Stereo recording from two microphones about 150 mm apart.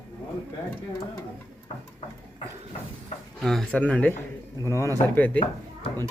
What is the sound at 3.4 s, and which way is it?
A man's voice, centre (ahead or behind).